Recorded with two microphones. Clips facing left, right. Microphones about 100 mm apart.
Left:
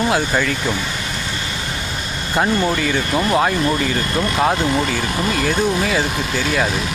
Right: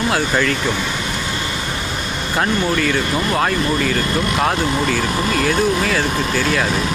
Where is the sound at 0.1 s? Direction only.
10° left (ahead or behind).